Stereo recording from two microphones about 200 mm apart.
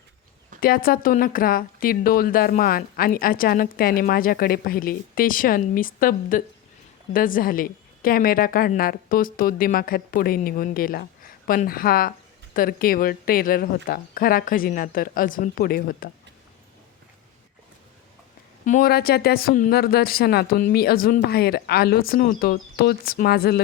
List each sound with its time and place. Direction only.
0.6 s speech: 45° left (ahead or behind)
18.6 s speech: 45° left (ahead or behind)